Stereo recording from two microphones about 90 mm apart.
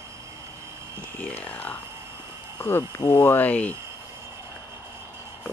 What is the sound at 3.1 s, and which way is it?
Speech, 20° left (ahead or behind).